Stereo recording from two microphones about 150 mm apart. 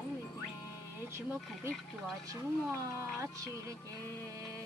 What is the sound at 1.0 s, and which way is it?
Music, 15° right (ahead or behind).